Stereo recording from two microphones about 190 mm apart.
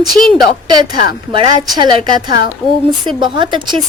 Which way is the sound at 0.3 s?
20° right (ahead or behind).